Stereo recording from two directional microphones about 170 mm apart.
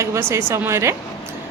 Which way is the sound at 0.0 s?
15° right (ahead or behind).